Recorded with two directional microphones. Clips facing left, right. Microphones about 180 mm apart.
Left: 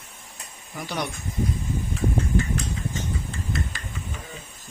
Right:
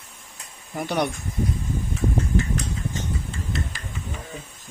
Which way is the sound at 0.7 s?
55° right (ahead or behind).